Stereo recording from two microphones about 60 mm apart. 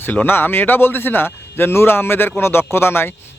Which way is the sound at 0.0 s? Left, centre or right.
Left.